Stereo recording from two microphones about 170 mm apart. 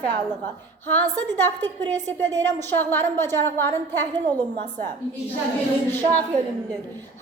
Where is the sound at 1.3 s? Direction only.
10° left (ahead or behind).